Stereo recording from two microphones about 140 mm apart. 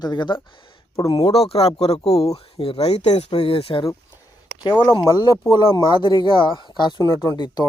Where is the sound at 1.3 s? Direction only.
45° left (ahead or behind).